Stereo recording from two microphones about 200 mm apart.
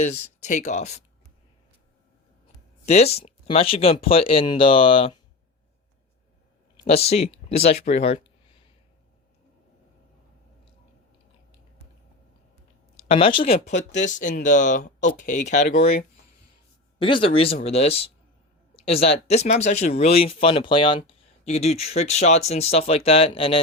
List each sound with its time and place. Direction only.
0.0 s speech: 35° left (ahead or behind)
2.8 s speech: 35° left (ahead or behind)
6.8 s speech: 30° left (ahead or behind)
13.0 s speech: 30° left (ahead or behind)
13.4 s speech: 40° left (ahead or behind)
15.7 s speech: 55° left (ahead or behind)
17.0 s speech: 25° left (ahead or behind)